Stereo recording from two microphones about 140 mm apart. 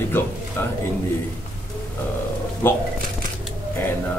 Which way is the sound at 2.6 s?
15° left (ahead or behind).